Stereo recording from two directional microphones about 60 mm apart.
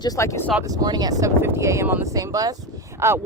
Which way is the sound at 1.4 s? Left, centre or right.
Right.